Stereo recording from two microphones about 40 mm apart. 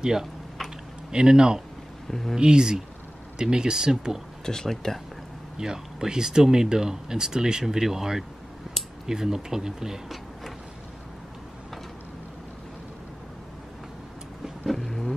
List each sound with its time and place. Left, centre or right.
0.0 s speech: centre
2.0 s speech: centre
2.3 s speech: centre
4.5 s speech: centre
5.6 s speech: centre
14.7 s a sound: centre